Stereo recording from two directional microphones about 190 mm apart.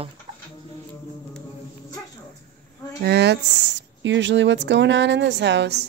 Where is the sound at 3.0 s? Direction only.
60° right (ahead or behind).